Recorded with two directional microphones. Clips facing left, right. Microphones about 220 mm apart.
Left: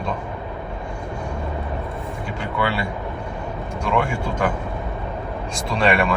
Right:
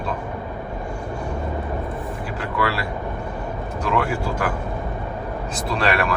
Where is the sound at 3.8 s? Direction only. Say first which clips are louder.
Even; 5° right (ahead or behind).